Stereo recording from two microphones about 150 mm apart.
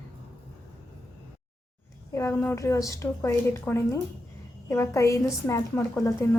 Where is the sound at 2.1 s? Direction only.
20° left (ahead or behind).